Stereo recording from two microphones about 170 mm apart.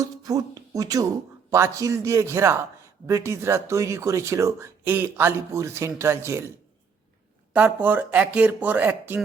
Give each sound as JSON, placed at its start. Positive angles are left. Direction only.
{"t": 0.0, "sound": "a sound", "side_deg": -20}
{"t": 1.5, "sound": "speech", "side_deg": -20}
{"t": 7.5, "sound": "speech", "side_deg": -10}